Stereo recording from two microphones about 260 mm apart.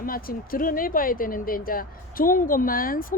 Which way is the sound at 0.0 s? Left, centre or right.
Left.